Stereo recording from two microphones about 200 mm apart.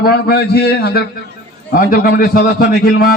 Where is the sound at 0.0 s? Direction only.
50° left (ahead or behind).